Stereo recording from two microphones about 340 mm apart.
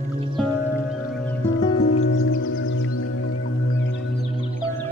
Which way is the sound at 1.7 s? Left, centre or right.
Left.